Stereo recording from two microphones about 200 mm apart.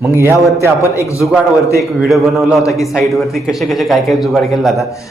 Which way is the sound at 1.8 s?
Centre (ahead or behind).